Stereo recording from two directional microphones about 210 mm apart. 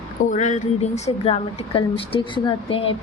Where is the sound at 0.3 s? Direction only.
35° left (ahead or behind).